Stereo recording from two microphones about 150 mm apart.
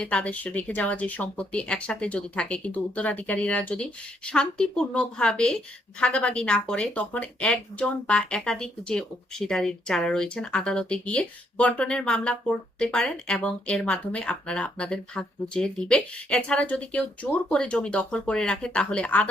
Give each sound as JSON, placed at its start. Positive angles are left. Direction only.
{"t": 0.0, "sound": "speech", "side_deg": 5}